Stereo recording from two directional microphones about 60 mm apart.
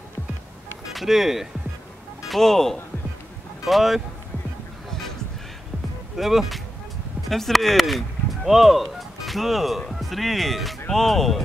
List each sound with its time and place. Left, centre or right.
0.9 s speech: centre
6.1 s speech: centre